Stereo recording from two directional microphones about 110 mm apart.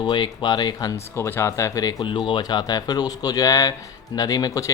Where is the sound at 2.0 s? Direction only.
45° left (ahead or behind).